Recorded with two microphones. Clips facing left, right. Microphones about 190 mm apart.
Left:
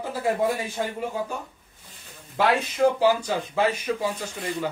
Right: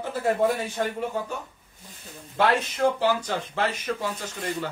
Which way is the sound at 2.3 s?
10° left (ahead or behind).